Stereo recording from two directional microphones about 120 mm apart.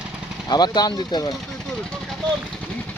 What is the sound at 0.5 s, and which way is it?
Speech, 35° left (ahead or behind).